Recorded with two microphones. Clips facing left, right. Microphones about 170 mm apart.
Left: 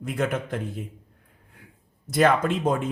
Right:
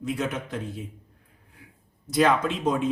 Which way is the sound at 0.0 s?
55° left (ahead or behind).